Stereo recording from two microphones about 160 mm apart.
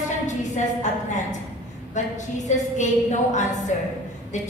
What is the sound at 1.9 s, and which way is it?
A woman's voice, 50° left (ahead or behind).